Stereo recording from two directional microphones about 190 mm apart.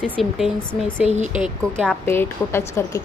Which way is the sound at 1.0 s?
35° right (ahead or behind).